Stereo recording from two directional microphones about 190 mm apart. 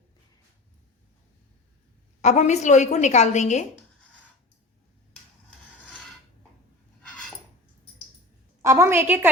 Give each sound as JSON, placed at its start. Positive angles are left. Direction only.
{"t": 2.2, "sound": "a woman's voice", "side_deg": 35}
{"t": 8.6, "sound": "a woman's voice", "side_deg": -15}